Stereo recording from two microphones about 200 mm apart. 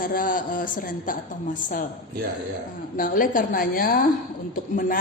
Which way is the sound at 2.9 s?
45° left (ahead or behind).